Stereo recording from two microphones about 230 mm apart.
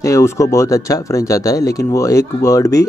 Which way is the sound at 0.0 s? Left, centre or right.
Centre.